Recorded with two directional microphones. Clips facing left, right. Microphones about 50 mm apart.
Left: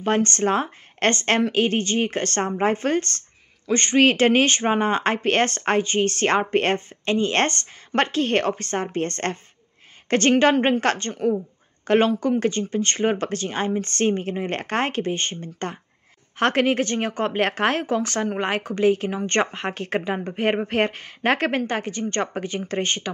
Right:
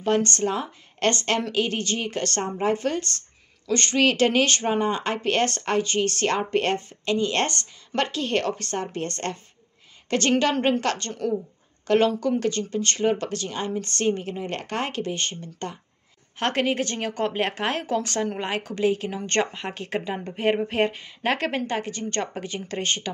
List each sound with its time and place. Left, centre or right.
0.0 s speech: left
2.4 s speech: left
2.7 s speech: left
3.6 s a woman's voice: left